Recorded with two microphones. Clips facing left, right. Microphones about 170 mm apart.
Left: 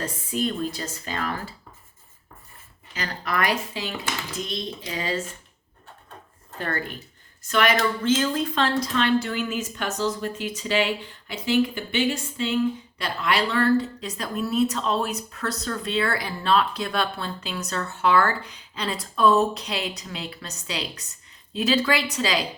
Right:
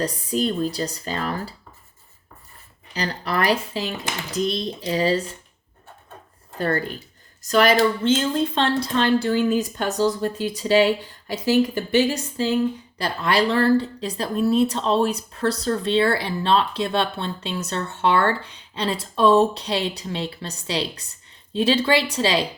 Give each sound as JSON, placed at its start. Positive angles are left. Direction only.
{"t": 0.0, "sound": "speech", "side_deg": -35}
{"t": 2.9, "sound": "speech", "side_deg": -35}
{"t": 6.6, "sound": "speech", "side_deg": -35}